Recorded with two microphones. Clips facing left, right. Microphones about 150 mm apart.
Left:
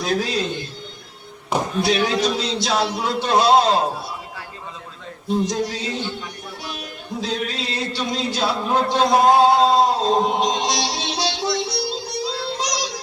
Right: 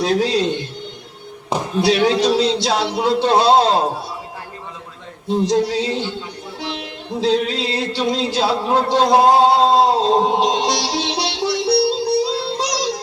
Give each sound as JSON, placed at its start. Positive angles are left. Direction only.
{"t": 0.0, "sound": "a man's voice", "side_deg": -25}
{"t": 1.8, "sound": "a man's voice", "side_deg": -25}
{"t": 5.3, "sound": "a man's voice", "side_deg": -25}
{"t": 7.2, "sound": "a sound", "side_deg": -25}